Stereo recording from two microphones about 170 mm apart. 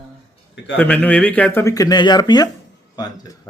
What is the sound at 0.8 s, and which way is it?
A man's voice, 10° left (ahead or behind).